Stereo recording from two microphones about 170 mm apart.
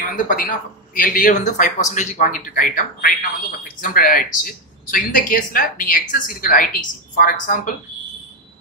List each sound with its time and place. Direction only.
0.3 s a man's voice: 55° left (ahead or behind)